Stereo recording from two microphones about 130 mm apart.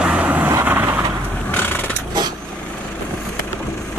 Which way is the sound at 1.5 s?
15° left (ahead or behind).